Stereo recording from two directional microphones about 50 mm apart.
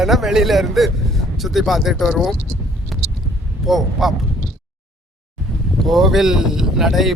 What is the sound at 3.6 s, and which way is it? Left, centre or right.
Speech, centre.